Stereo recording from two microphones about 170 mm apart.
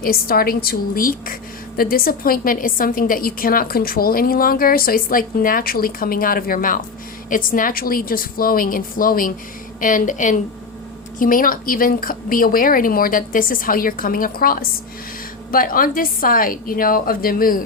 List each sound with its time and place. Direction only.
0.0 s a woman's voice: 60° left (ahead or behind)